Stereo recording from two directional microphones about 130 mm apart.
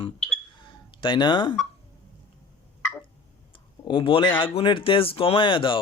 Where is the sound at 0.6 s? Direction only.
40° left (ahead or behind).